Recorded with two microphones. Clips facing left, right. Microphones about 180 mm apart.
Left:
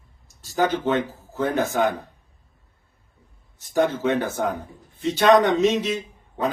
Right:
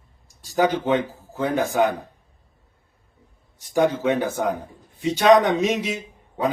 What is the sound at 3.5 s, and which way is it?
A man's voice, 15° right (ahead or behind).